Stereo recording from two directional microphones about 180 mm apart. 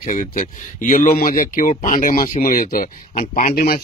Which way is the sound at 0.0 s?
45° left (ahead or behind).